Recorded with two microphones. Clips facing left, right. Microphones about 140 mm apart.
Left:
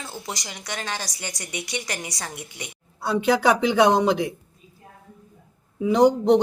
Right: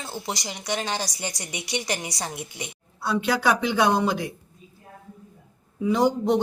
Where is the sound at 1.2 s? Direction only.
30° right (ahead or behind).